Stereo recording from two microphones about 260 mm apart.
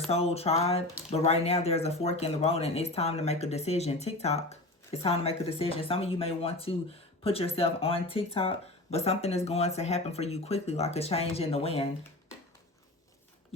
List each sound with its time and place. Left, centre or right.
0.1 s speech: left